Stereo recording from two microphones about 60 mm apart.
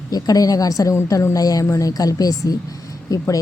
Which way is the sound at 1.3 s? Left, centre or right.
Left.